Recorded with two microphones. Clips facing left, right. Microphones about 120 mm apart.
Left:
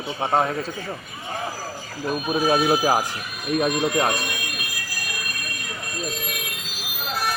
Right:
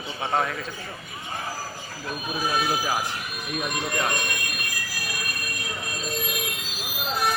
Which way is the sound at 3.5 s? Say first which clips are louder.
Left 8 dB; 60° left (ahead or behind).